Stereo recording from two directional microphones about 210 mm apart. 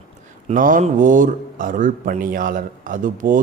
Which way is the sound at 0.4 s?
40° right (ahead or behind).